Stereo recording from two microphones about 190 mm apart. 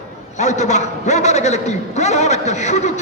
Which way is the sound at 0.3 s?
35° left (ahead or behind).